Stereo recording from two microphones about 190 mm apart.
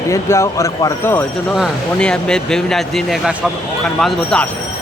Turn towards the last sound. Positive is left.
turn(degrees=5)  # may be behind; listen again after turning